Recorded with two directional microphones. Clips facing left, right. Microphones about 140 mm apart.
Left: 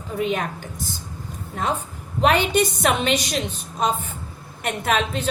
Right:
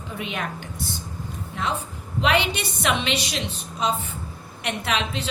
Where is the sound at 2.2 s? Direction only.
45° left (ahead or behind).